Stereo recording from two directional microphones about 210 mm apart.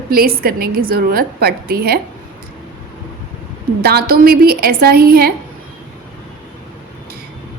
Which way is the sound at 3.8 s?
45° right (ahead or behind).